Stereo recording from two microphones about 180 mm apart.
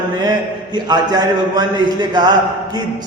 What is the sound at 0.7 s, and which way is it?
A man's voice, 25° right (ahead or behind).